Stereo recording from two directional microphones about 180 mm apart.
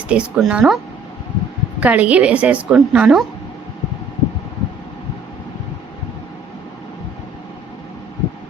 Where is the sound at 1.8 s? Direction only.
10° right (ahead or behind).